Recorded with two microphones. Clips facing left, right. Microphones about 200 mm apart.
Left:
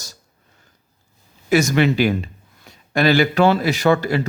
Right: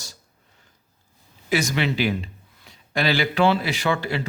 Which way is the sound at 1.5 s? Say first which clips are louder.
Left 7 dB; 45° left (ahead or behind).